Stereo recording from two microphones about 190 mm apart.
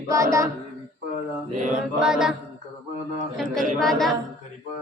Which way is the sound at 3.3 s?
Centre (ahead or behind).